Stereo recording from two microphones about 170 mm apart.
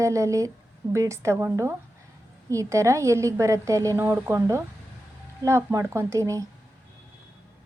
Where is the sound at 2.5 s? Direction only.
20° right (ahead or behind).